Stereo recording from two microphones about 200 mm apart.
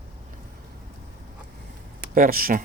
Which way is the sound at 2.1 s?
45° right (ahead or behind).